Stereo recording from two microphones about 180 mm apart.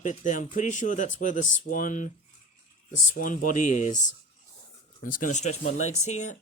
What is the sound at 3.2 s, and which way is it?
Speech, 45° left (ahead or behind).